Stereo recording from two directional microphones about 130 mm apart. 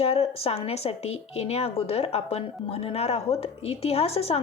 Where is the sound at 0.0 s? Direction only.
50° left (ahead or behind).